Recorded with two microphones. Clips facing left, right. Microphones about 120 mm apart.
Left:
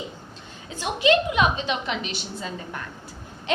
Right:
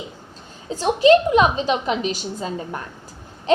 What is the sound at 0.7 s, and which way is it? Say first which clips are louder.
A woman's voice: right 7 dB; 40° right (ahead or behind).